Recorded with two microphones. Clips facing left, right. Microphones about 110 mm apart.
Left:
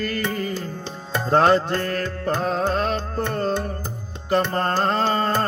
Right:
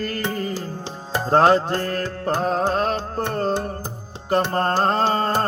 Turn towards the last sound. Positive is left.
turn(degrees=-30)  # may be behind; listen again after turning